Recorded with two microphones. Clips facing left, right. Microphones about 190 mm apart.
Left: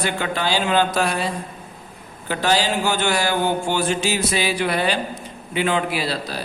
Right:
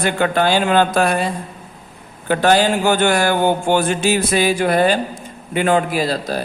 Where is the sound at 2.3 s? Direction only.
55° right (ahead or behind).